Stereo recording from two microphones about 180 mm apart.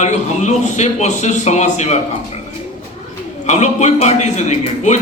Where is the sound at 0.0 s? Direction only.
40° left (ahead or behind).